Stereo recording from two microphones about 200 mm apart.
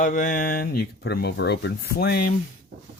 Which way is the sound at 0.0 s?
40° left (ahead or behind).